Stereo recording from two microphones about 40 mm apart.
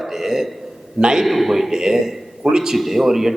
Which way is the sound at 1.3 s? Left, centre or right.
Centre.